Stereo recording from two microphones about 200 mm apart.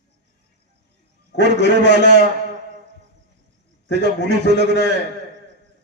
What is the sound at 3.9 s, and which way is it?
Speech, 60° left (ahead or behind).